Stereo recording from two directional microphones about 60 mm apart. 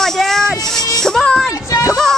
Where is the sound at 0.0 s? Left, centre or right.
Centre.